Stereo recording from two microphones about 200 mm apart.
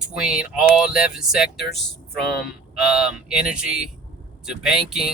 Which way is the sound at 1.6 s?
55° left (ahead or behind).